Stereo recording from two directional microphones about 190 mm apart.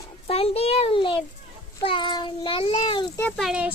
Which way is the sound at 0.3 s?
30° left (ahead or behind).